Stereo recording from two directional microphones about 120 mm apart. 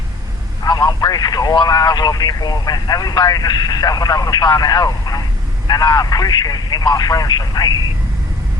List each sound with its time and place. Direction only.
0.6 s speech: 35° left (ahead or behind)